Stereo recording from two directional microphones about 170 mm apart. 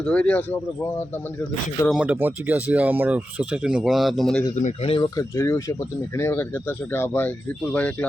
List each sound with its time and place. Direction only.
0.1 s speech: 10° left (ahead or behind)
1.9 s speech: 10° right (ahead or behind)
4.6 s speech: 35° left (ahead or behind)
5.1 s speech: 15° left (ahead or behind)